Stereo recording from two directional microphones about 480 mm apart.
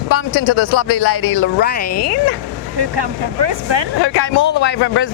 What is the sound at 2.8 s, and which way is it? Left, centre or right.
Speech, right.